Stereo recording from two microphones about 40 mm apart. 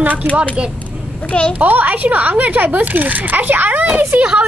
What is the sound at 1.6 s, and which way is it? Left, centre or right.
A woman's voice, right.